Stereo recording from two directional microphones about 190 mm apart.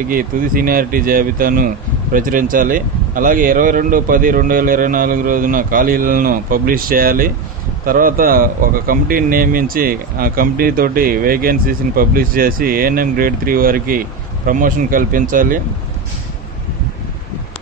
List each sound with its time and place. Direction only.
0.1 s a man's voice: 50° right (ahead or behind)